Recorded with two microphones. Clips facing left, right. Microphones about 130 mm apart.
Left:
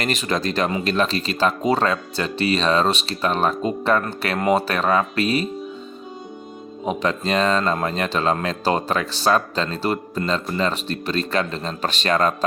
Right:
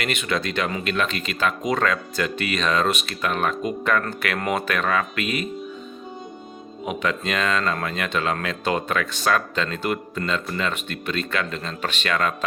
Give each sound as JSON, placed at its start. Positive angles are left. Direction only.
{"t": 0.0, "sound": "speech", "side_deg": 35}
{"t": 6.8, "sound": "speech", "side_deg": 35}